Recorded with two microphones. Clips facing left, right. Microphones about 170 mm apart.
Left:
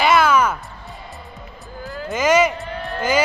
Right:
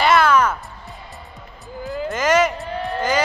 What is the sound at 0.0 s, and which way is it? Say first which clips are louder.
Music: even; 5° left (ahead or behind).